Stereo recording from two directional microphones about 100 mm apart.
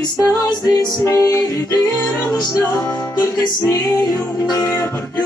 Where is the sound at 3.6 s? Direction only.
40° left (ahead or behind).